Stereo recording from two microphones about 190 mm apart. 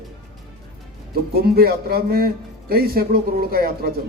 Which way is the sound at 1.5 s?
55° right (ahead or behind).